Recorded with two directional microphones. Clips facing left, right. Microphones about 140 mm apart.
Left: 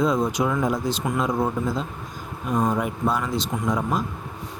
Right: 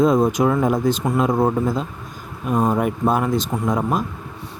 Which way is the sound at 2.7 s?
50° right (ahead or behind).